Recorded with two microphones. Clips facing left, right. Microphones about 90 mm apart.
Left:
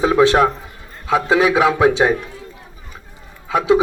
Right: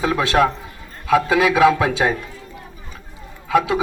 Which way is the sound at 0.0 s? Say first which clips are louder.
Left 4 dB; 25° left (ahead or behind).